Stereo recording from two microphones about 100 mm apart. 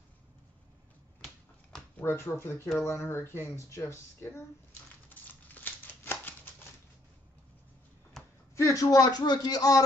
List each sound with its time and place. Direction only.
2.1 s speech: 25° left (ahead or behind)
5.2 s a sound: 20° left (ahead or behind)
8.5 s a man's voice: 35° left (ahead or behind)